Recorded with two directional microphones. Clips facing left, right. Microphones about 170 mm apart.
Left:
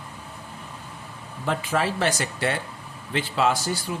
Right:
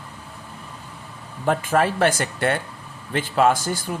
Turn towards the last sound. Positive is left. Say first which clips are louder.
# right 4 dB
turn(degrees=-50)  # may be behind; listen again after turning